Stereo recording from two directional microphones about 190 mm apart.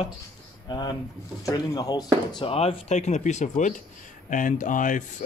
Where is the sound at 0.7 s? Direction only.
20° left (ahead or behind).